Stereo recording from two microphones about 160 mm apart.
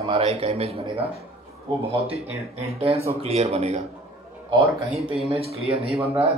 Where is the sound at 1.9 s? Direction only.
40° right (ahead or behind).